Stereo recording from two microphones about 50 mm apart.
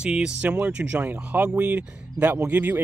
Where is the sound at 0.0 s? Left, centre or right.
Centre.